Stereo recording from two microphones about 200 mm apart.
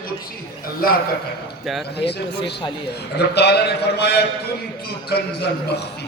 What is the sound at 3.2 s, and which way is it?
A man's voice, 55° left (ahead or behind).